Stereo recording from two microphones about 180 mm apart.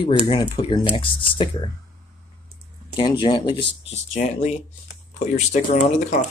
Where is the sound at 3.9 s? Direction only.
40° left (ahead or behind).